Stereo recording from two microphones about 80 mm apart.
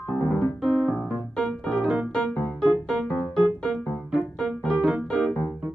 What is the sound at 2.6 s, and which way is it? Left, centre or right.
Music, centre.